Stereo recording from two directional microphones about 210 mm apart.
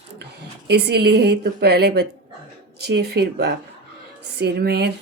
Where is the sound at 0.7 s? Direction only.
50° right (ahead or behind).